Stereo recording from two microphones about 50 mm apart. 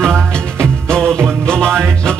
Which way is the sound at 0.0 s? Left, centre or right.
Centre.